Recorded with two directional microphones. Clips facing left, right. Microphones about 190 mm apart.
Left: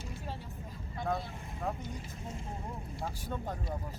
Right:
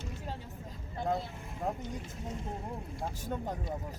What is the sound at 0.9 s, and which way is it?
Vehicle, 25° right (ahead or behind).